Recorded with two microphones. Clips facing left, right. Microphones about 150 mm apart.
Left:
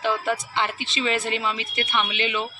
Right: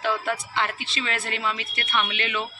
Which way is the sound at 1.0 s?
20° left (ahead or behind).